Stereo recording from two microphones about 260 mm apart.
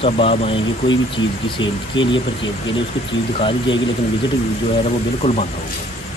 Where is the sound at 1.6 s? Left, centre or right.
Left.